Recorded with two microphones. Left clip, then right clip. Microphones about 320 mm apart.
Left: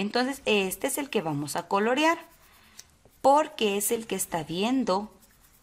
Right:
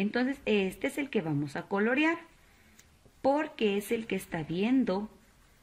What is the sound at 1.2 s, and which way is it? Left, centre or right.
Speech, left.